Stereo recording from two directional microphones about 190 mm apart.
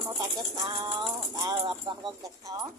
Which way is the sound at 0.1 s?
25° right (ahead or behind).